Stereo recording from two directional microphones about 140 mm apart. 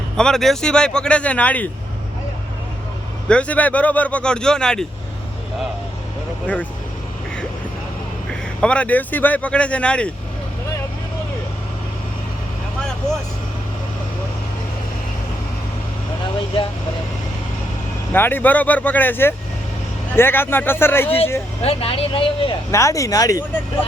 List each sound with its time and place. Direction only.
0.2 s speech: 5° left (ahead or behind)
3.2 s speech: 10° left (ahead or behind)
8.3 s speech: 10° left (ahead or behind)
18.1 s speech: 15° left (ahead or behind)
21.6 s speech: 45° left (ahead or behind)
22.7 s speech: 20° left (ahead or behind)